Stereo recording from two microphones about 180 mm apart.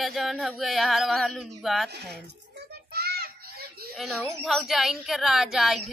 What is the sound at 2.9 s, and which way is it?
Children playing, 60° right (ahead or behind).